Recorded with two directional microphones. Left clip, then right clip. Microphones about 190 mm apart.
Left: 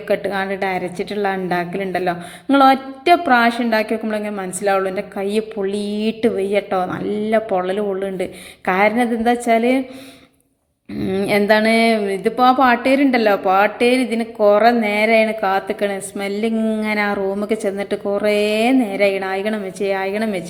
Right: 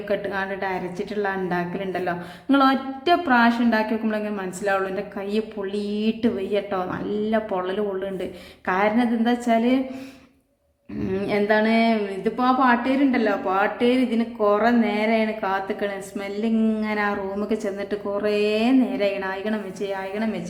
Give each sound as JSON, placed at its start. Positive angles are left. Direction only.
{"t": 0.1, "sound": "a woman's voice", "side_deg": 20}
{"t": 11.0, "sound": "a woman's voice", "side_deg": 20}